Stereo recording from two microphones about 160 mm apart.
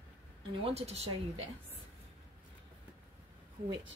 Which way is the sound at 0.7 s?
40° right (ahead or behind).